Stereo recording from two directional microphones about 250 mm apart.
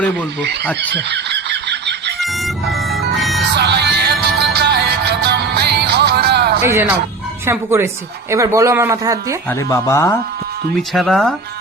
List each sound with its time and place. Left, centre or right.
0.7 s speech: centre
0.9 s fowl: right
3.2 s music: centre
3.5 s music: right
6.6 s a man's voice: centre
9.5 s speech: centre